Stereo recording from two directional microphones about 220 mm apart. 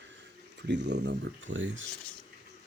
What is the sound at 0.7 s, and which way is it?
Speech, 50° right (ahead or behind).